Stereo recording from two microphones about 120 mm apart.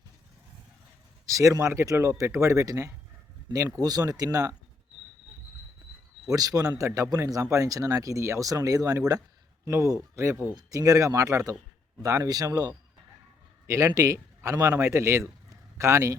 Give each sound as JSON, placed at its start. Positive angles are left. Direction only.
{"t": 1.3, "sound": "speech", "side_deg": -25}
{"t": 6.2, "sound": "speech", "side_deg": -30}